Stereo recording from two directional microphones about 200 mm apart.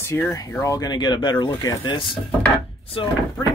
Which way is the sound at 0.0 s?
10° left (ahead or behind).